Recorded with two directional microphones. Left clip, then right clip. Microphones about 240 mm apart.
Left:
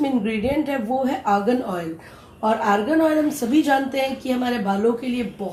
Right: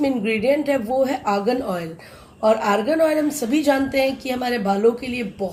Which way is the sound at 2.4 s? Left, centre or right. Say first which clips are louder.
Right 2 dB; right.